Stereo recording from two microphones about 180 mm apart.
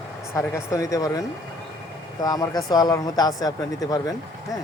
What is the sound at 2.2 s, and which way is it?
Speech, 20° left (ahead or behind).